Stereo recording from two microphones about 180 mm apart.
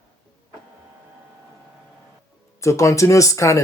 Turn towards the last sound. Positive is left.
turn(degrees=15)  # may be behind; listen again after turning